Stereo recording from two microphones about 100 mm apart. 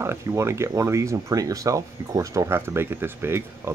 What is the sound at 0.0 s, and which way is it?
Speech, 25° right (ahead or behind).